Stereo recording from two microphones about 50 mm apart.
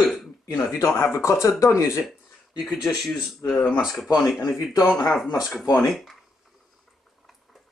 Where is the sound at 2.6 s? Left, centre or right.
Centre.